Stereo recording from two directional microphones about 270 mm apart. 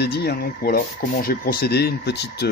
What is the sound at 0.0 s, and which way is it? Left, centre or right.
Speech, left.